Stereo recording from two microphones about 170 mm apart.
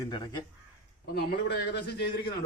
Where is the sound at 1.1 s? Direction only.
70° left (ahead or behind).